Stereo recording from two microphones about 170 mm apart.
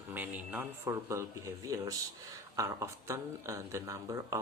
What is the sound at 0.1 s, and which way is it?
Speech, 10° right (ahead or behind).